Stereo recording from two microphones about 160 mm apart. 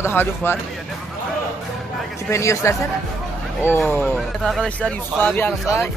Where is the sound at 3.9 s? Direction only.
10° left (ahead or behind).